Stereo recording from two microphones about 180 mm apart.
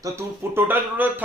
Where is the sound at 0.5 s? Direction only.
10° right (ahead or behind).